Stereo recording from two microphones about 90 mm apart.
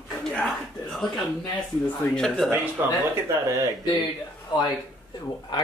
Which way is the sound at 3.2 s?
35° right (ahead or behind).